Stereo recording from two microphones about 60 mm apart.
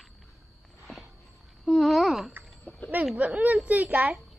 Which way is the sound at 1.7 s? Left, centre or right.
Centre.